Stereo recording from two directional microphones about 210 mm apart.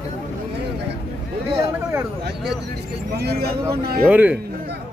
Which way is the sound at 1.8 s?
10° right (ahead or behind).